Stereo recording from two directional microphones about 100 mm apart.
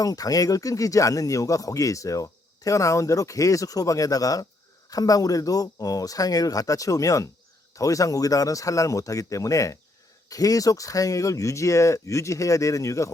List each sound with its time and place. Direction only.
0.0 s speech: 35° left (ahead or behind)